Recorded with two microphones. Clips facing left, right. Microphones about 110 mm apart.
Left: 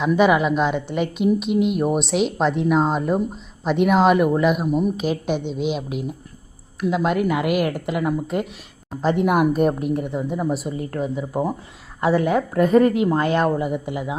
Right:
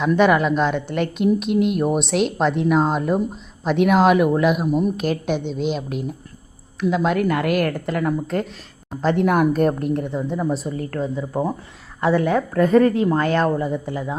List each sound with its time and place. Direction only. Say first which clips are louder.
0.0 s a woman's voice: even; 5° left (ahead or behind)